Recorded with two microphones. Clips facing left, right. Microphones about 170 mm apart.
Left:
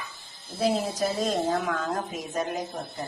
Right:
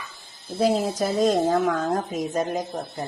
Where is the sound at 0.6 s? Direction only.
45° right (ahead or behind).